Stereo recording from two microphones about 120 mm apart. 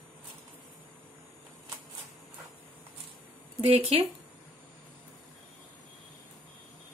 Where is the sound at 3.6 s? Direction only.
50° right (ahead or behind).